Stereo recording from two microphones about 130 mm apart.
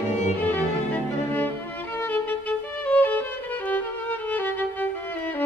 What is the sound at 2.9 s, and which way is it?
Violin, 15° left (ahead or behind).